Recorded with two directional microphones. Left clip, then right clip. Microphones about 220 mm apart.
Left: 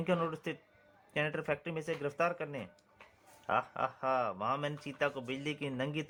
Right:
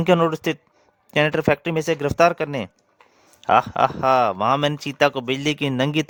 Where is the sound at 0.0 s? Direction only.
55° right (ahead or behind).